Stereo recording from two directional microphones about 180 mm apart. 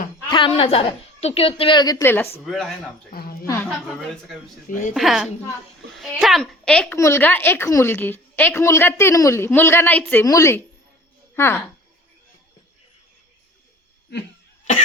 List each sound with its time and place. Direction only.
0.3 s a woman's voice: 25° left (ahead or behind)
2.4 s a child's voice: centre (ahead or behind)
3.1 s a woman's voice: 55° left (ahead or behind)
3.4 s a woman's voice: 15° left (ahead or behind)
3.7 s a child's voice: centre (ahead or behind)
4.7 s a woman's voice: 45° left (ahead or behind)
4.9 s a child's voice: centre (ahead or behind)